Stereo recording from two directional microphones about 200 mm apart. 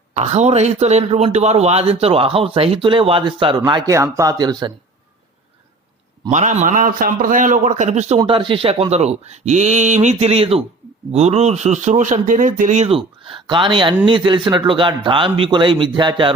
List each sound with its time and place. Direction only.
0.1 s a man's voice: 35° right (ahead or behind)
6.3 s a man's voice: 35° right (ahead or behind)